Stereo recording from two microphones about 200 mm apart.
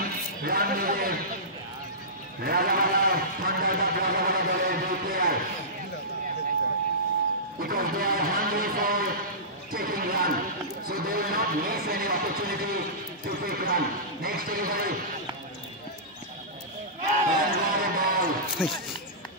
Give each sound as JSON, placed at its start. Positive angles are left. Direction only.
{"t": 0.4, "sound": "speech", "side_deg": -45}
{"t": 2.4, "sound": "speech", "side_deg": -50}
{"t": 7.6, "sound": "speech", "side_deg": -45}
{"t": 17.0, "sound": "crowd", "side_deg": -45}
{"t": 18.6, "sound": "speech", "side_deg": -5}